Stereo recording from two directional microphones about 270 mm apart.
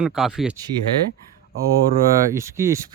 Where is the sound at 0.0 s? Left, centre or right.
Centre.